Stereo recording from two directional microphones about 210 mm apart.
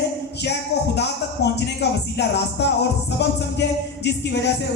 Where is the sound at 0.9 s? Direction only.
55° left (ahead or behind).